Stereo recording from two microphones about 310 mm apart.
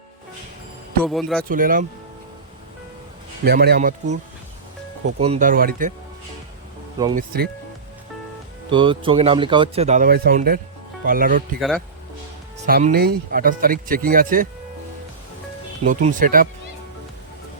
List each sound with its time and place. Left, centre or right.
1.0 s speech: centre
1.5 s speech: right
3.4 s speech: right
5.2 s speech: right
7.2 s speech: right
8.7 s speech: centre
12.6 s speech: right
15.8 s speech: right